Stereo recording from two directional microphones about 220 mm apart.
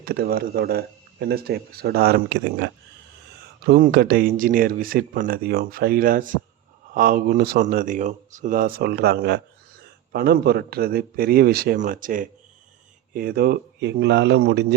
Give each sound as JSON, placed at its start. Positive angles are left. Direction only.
{"t": 0.0, "sound": "speech", "side_deg": -45}
{"t": 3.7, "sound": "speech", "side_deg": -40}